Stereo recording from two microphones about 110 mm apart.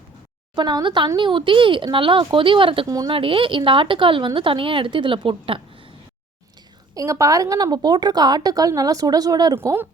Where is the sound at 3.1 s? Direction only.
55° right (ahead or behind).